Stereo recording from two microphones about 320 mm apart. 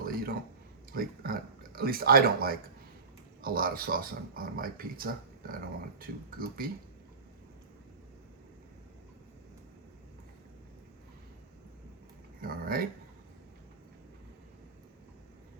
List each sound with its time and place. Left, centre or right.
0.0 s a sound: right
0.9 s speech: right
12.4 s speech: right